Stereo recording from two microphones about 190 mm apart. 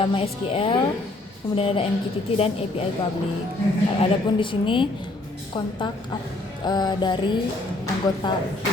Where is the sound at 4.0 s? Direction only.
25° left (ahead or behind).